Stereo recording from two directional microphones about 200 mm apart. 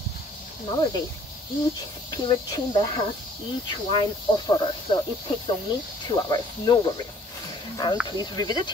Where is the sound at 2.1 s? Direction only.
20° left (ahead or behind).